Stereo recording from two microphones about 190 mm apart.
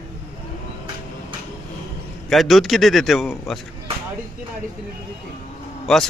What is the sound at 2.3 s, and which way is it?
A man's voice, centre (ahead or behind).